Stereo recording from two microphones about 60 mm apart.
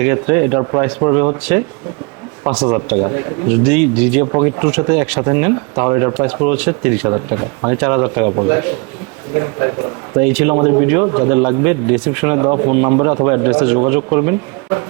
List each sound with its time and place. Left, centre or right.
0.0 s a man's voice: right
2.5 s speech: centre
2.9 s a man's voice: right
6.1 s a man's voice: centre
12.2 s a man's voice: right